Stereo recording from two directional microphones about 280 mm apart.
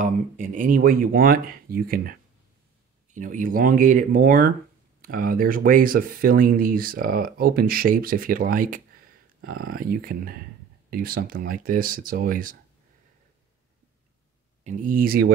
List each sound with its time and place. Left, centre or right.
0.0 s speech: right
14.6 s speech: right